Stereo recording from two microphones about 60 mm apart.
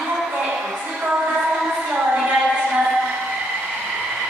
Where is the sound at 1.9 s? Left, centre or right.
Right.